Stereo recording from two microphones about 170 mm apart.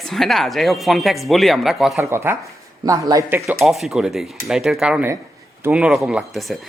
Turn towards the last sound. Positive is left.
turn(degrees=0)  # may be behind; listen again after turning